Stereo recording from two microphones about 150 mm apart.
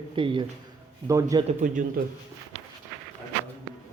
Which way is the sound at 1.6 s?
60° right (ahead or behind).